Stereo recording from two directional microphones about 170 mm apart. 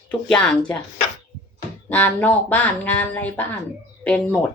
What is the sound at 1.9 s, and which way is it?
A woman's voice, 10° left (ahead or behind).